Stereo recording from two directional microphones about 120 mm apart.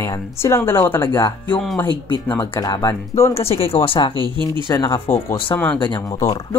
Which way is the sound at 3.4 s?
55° left (ahead or behind).